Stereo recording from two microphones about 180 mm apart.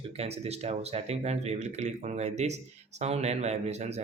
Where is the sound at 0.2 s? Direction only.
35° right (ahead or behind).